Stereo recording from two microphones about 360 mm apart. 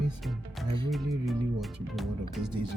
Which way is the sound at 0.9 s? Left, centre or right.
Centre.